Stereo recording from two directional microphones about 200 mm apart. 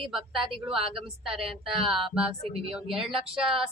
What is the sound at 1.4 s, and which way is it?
Speech, 30° right (ahead or behind).